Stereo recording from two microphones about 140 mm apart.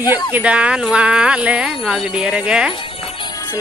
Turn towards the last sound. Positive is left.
turn(degrees=30)  # may be behind; listen again after turning